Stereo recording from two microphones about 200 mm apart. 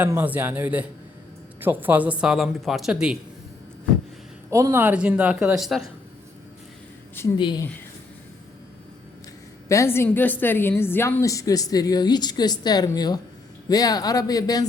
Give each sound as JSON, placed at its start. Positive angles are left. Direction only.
{"t": 0.0, "sound": "a woman's voice", "side_deg": -10}
{"t": 4.5, "sound": "a woman's voice", "side_deg": -15}
{"t": 7.3, "sound": "speech", "side_deg": 20}
{"t": 9.6, "sound": "a woman's voice", "side_deg": 15}